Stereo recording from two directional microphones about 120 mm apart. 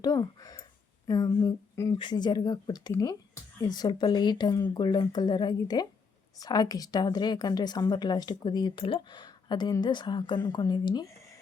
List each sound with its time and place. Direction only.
0.0 s a woman's voice: 30° left (ahead or behind)